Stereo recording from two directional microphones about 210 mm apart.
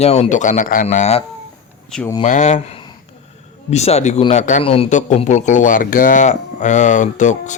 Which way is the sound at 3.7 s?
30° left (ahead or behind).